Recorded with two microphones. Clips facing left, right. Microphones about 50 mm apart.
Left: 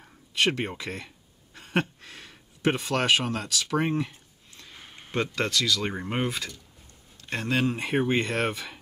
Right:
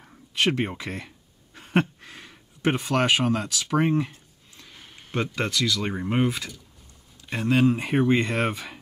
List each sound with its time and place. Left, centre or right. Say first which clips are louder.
0.3 s speech: right 2 dB; right
4.7 s a sound: left 2 dB; centre
5.1 s speech: even; centre
5.9 s speech: right 4 dB; centre
6.3 s speech: even; right